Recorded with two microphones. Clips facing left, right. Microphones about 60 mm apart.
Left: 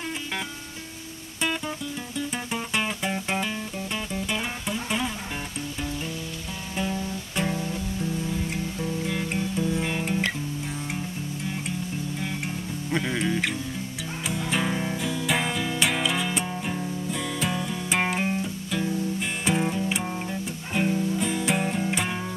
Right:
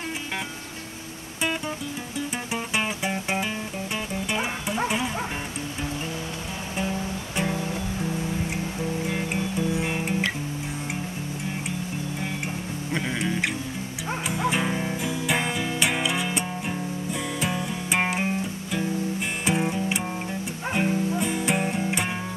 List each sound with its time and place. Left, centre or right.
2.1 s music: centre
7.5 s music: right
9.0 s guitar: centre
12.9 s music: centre
14.5 s music: centre